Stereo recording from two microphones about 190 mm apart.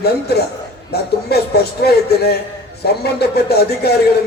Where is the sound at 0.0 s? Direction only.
60° left (ahead or behind).